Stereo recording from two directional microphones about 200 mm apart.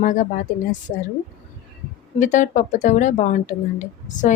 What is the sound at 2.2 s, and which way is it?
Speech, 40° left (ahead or behind).